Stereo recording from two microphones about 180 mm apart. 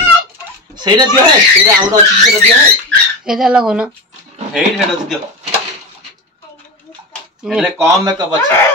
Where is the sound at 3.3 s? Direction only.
5° right (ahead or behind).